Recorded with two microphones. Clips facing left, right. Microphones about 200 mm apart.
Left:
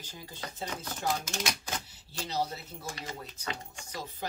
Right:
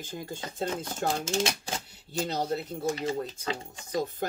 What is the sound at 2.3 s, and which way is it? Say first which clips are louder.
Speech: right 1 dB; 55° right (ahead or behind).